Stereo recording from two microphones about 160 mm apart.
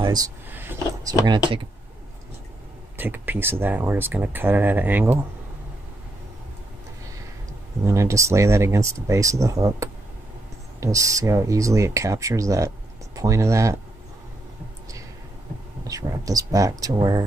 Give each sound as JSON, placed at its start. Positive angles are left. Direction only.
{"t": 0.0, "sound": "speech", "side_deg": -25}
{"t": 0.5, "sound": "a sound", "side_deg": -15}
{"t": 3.0, "sound": "speech", "side_deg": -10}
{"t": 7.8, "sound": "speech", "side_deg": -20}
{"t": 15.9, "sound": "speech", "side_deg": -20}